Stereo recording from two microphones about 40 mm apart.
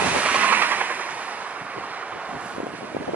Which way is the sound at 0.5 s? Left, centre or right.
Right.